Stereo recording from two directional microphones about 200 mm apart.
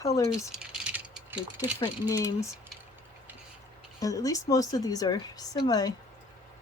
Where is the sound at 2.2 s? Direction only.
15° left (ahead or behind).